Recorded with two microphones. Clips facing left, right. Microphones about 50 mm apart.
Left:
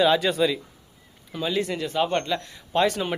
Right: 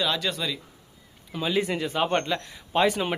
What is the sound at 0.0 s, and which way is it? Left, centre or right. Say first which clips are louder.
Speech: left 7 dB; centre.